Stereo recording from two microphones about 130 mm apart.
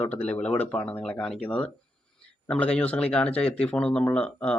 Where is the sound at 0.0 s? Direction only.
10° left (ahead or behind).